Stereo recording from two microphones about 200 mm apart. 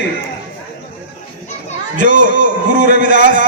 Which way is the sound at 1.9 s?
40° right (ahead or behind).